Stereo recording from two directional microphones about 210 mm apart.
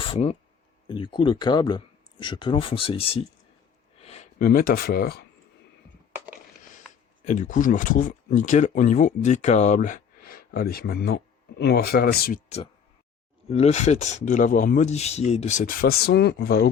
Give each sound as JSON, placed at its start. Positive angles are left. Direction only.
{"t": 0.0, "sound": "speech", "side_deg": 25}
{"t": 7.3, "sound": "speech", "side_deg": 35}
{"t": 13.5, "sound": "speech", "side_deg": 30}